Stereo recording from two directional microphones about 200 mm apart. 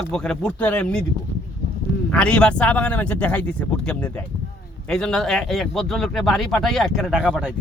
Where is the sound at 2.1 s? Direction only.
5° left (ahead or behind).